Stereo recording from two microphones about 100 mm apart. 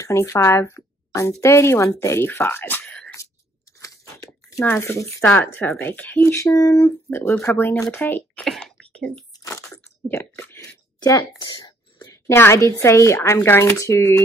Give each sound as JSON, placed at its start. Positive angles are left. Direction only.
{"t": 0.0, "sound": "speech", "side_deg": 30}
{"t": 2.8, "sound": "speech", "side_deg": 10}
{"t": 3.8, "sound": "a sound", "side_deg": 30}
{"t": 5.3, "sound": "speech", "side_deg": 20}
{"t": 6.2, "sound": "speech", "side_deg": 30}
{"t": 8.5, "sound": "throat clearing", "side_deg": 5}
{"t": 10.1, "sound": "chewing", "side_deg": 25}
{"t": 11.6, "sound": "whispering", "side_deg": 40}
{"t": 12.3, "sound": "speech", "side_deg": 25}